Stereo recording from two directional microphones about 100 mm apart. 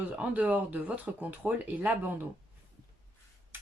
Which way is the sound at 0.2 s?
15° right (ahead or behind).